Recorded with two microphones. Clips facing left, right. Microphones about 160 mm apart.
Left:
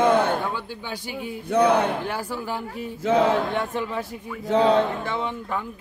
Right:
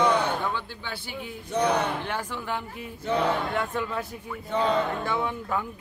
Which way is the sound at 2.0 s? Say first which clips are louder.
Left 3 dB; 5° left (ahead or behind).